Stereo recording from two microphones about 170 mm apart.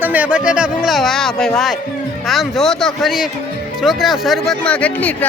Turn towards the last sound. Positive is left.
turn(degrees=10)  # may be behind; listen again after turning